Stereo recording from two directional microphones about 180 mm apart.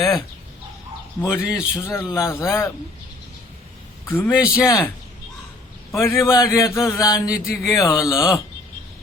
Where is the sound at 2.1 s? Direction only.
15° left (ahead or behind).